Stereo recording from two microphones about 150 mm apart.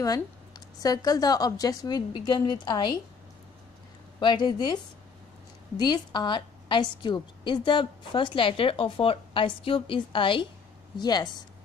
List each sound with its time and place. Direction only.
0.8 s a woman's voice: 25° left (ahead or behind)
4.2 s a woman's voice: 30° left (ahead or behind)
5.8 s a woman's voice: 30° left (ahead or behind)